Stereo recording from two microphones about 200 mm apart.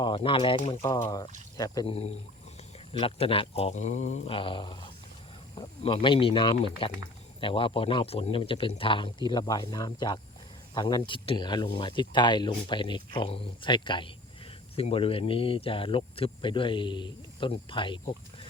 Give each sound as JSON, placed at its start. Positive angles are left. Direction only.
{"t": 0.0, "sound": "speech", "side_deg": 25}
{"t": 3.0, "sound": "speech", "side_deg": 25}